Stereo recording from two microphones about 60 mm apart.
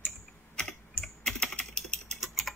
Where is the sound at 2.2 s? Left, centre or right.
Centre.